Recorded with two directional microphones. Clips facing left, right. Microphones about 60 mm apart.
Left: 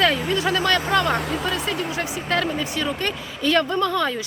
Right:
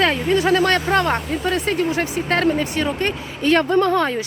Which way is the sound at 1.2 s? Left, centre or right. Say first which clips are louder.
Right 2 dB; left.